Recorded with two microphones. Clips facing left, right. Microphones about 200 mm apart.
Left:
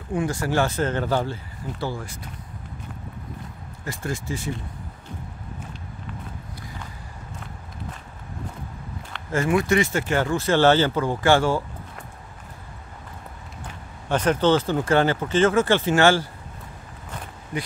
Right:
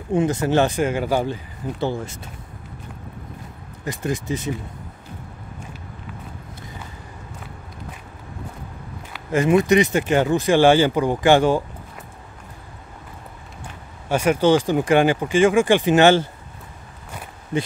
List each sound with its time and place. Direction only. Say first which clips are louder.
0.1 s speech: right 5 dB; 20° right (ahead or behind)
3.8 s speech: right 5 dB; 20° right (ahead or behind)
9.3 s speech: right 5 dB; 20° right (ahead or behind)
14.0 s speech: right 3 dB; 10° right (ahead or behind)